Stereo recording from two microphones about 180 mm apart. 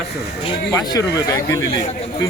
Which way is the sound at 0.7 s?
20° left (ahead or behind).